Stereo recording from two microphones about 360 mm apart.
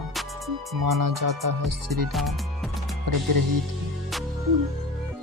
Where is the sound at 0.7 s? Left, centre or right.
Right.